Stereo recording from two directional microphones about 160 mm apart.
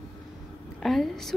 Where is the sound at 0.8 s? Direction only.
Centre (ahead or behind).